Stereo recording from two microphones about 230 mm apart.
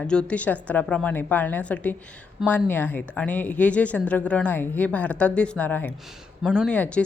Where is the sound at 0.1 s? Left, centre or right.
Centre.